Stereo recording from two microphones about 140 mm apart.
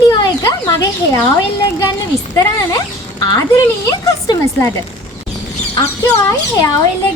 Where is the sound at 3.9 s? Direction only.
25° left (ahead or behind).